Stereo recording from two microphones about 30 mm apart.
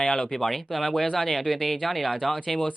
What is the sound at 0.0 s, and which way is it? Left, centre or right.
Speech, centre.